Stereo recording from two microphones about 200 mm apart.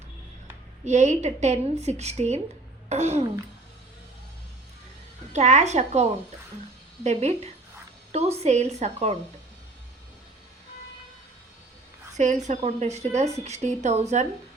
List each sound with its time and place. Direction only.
0.9 s a woman's voice: 35° right (ahead or behind)
5.3 s a woman's voice: 35° right (ahead or behind)
12.1 s a woman's voice: 35° right (ahead or behind)